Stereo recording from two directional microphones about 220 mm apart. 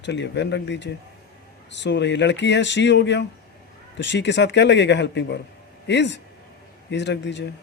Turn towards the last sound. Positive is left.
turn(degrees=55)  # may be behind; listen again after turning